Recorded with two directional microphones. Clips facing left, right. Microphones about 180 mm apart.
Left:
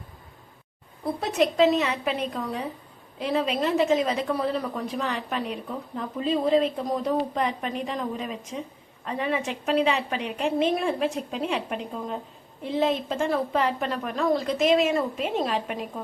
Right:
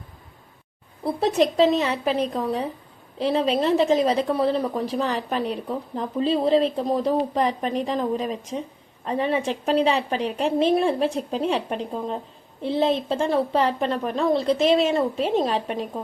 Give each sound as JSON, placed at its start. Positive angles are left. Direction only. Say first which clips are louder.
{"t": 1.2, "sound": "a woman's voice", "louder": "right 2 dB", "side_deg": -30}